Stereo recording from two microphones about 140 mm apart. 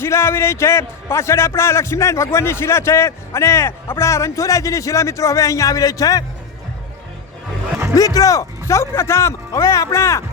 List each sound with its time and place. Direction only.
0.0 s a man's voice: 20° left (ahead or behind)
7.9 s a man's voice: 25° left (ahead or behind)